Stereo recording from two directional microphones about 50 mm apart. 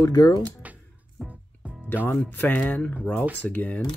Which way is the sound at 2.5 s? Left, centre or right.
Left.